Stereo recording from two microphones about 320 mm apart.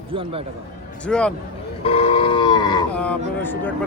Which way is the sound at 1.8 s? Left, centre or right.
Centre.